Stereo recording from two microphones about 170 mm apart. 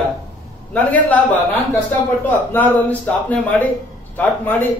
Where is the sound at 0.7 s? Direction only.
10° left (ahead or behind).